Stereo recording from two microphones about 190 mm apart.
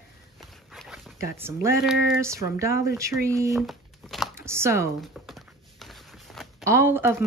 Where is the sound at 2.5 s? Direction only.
15° right (ahead or behind).